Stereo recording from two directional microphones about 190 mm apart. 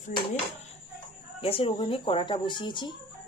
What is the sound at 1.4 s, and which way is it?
Speech, 30° left (ahead or behind).